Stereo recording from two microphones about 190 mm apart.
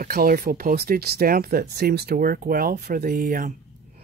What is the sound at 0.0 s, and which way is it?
Speech, 50° right (ahead or behind).